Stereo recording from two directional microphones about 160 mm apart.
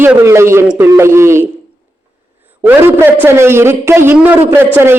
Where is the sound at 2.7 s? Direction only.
15° right (ahead or behind).